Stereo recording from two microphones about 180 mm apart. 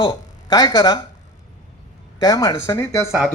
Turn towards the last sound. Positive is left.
turn(degrees=20)  # may be behind; listen again after turning